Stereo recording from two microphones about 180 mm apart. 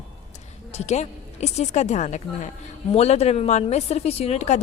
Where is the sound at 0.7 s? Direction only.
40° left (ahead or behind).